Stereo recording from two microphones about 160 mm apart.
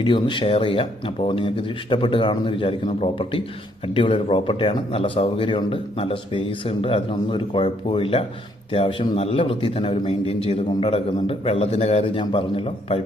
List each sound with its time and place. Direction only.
0.0 s speech: 30° left (ahead or behind)